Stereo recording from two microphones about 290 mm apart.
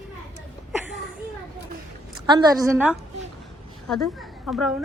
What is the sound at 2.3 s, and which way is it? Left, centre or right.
A woman's voice, centre.